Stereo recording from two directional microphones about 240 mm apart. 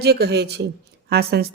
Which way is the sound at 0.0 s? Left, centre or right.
Right.